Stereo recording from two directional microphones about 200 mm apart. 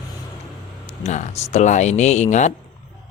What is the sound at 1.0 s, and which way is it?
Speech, 35° left (ahead or behind).